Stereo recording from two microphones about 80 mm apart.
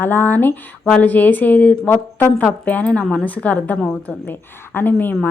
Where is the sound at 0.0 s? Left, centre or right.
Left.